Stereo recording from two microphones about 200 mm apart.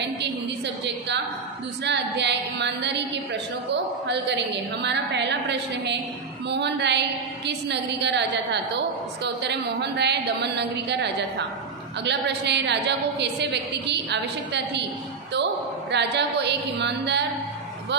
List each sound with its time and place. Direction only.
1.9 s a woman's voice: 60° right (ahead or behind)
4.8 s a woman's voice: 60° right (ahead or behind)
15.9 s a woman's voice: 60° right (ahead or behind)